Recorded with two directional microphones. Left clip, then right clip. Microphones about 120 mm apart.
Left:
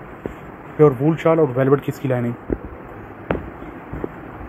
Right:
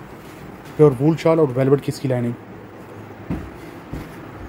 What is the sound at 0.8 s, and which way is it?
Speech, 35° right (ahead or behind).